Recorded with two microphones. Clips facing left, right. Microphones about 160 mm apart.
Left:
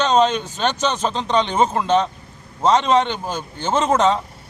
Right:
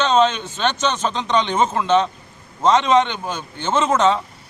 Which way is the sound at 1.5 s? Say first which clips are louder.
Right 1 dB; 35° left (ahead or behind).